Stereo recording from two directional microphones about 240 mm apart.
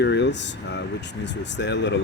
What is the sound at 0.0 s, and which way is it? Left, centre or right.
Speech, left.